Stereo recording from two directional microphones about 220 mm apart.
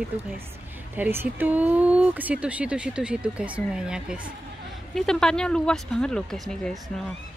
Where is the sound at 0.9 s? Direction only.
10° right (ahead or behind).